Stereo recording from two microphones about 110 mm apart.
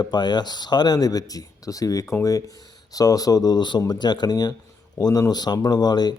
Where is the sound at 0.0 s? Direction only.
40° left (ahead or behind).